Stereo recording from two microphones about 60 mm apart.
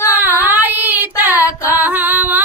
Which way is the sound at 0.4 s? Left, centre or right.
Right.